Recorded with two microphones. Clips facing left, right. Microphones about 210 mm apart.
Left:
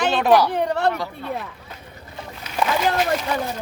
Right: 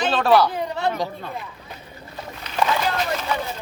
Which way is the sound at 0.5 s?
70° left (ahead or behind).